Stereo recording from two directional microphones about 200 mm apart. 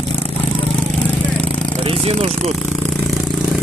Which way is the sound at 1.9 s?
30° right (ahead or behind).